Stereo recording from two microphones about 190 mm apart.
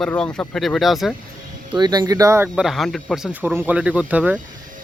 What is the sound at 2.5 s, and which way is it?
Speech, centre (ahead or behind).